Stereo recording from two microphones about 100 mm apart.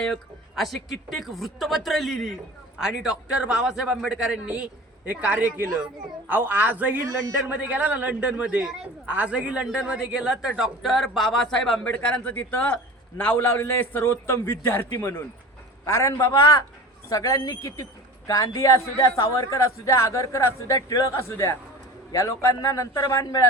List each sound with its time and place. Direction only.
0.0 s a man's voice: 5° left (ahead or behind)
11.9 s a man's voice: 20° left (ahead or behind); by 23.5 s 35° left (ahead or behind)